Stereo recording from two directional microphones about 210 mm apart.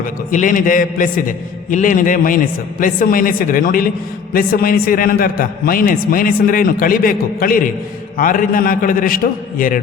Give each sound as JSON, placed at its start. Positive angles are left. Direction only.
{"t": 0.3, "sound": "a man's voice", "side_deg": 40}